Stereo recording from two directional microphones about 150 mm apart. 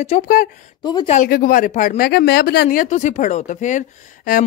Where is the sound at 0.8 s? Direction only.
30° left (ahead or behind).